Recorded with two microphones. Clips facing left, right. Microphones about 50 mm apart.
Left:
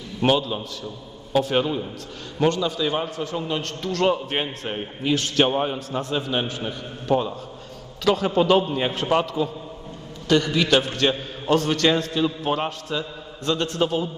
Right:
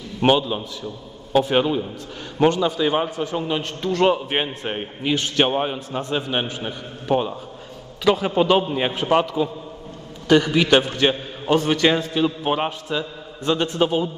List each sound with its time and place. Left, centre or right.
0.2 s a man's voice: right
1.4 s a man's voice: centre
2.3 s a man's voice: right